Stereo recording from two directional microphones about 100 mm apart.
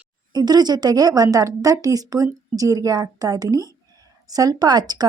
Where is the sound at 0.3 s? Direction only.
45° right (ahead or behind).